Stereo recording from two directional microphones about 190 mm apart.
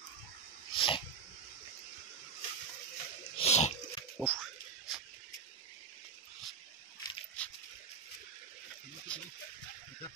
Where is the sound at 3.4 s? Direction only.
35° left (ahead or behind).